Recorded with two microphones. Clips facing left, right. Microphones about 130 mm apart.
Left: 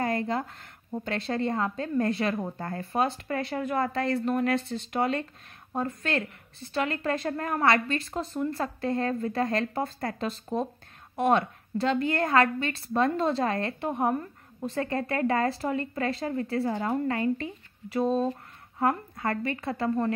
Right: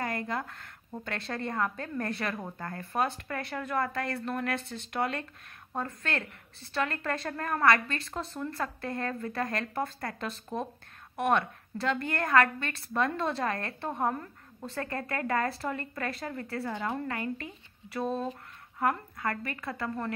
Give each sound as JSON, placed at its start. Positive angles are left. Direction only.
{"t": 0.0, "sound": "a woman's voice", "side_deg": 25}